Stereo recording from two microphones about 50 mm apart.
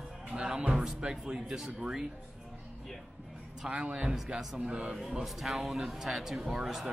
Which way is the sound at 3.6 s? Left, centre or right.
Right.